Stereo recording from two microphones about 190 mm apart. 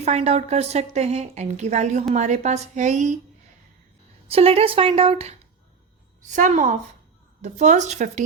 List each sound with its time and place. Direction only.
0.0 s a woman's voice: 35° right (ahead or behind)
4.3 s a woman's voice: 30° right (ahead or behind)
6.3 s a woman's voice: 40° right (ahead or behind)